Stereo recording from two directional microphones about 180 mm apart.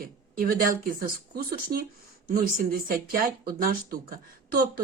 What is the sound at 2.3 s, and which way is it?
Speech, 55° right (ahead or behind).